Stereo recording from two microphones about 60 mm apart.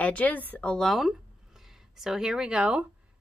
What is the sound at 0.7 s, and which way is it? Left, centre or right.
A woman's voice, centre.